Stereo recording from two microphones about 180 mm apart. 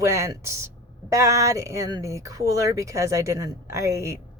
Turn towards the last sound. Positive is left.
turn(degrees=-15)  # may be behind; listen again after turning